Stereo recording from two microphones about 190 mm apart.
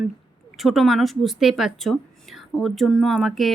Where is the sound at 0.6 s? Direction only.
Centre (ahead or behind).